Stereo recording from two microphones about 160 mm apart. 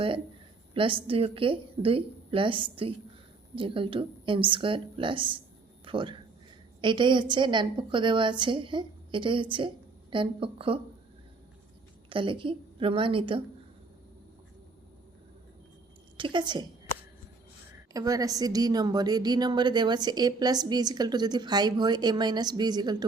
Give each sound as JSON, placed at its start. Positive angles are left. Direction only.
{"t": 0.7, "sound": "a woman's voice", "side_deg": -30}
{"t": 12.0, "sound": "a woman's voice", "side_deg": -30}
{"t": 16.1, "sound": "a woman's voice", "side_deg": -30}
{"t": 17.9, "sound": "a woman's voice", "side_deg": -20}